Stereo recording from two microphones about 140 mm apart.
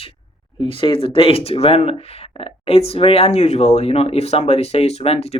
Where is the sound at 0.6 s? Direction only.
35° left (ahead or behind).